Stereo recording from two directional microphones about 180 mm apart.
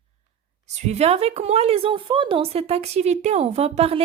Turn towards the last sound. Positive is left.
turn(degrees=-35)  # may be behind; listen again after turning